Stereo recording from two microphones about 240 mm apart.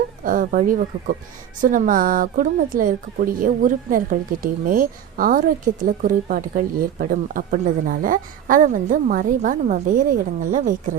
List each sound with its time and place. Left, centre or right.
0.3 s speech: right